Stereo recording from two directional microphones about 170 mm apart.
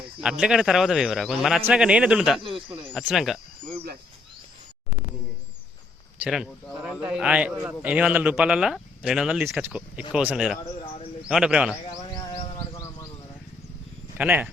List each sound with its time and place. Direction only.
0.2 s a man's voice: 5° right (ahead or behind)
2.4 s speech: 30° right (ahead or behind)
2.9 s a man's voice: centre (ahead or behind)
6.2 s a man's voice: 5° right (ahead or behind)
12.7 s a sound: 15° left (ahead or behind)
14.2 s speech: 10° right (ahead or behind)